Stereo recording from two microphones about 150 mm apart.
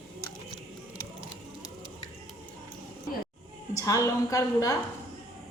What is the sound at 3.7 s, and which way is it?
A woman's voice, 20° left (ahead or behind).